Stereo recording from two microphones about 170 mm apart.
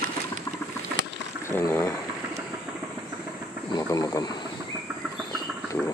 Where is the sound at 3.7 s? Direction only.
20° left (ahead or behind).